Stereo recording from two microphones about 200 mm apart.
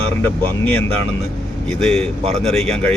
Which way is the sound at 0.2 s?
10° left (ahead or behind).